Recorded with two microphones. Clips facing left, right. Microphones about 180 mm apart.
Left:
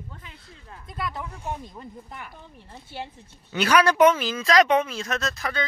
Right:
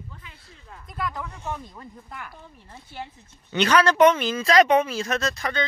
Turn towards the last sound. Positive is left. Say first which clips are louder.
# right 2 dB
turn(degrees=0)  # may be behind; listen again after turning